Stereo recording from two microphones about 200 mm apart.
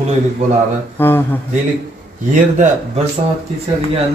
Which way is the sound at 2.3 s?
35° right (ahead or behind).